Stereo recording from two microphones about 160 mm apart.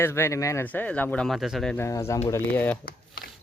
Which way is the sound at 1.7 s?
15° left (ahead or behind).